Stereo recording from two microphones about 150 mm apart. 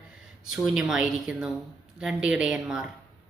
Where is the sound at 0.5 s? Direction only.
5° right (ahead or behind).